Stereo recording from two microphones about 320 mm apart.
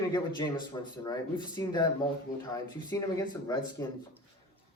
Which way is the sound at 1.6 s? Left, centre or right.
Centre.